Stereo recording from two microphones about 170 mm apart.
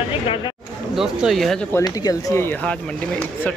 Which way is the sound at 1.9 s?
20° left (ahead or behind).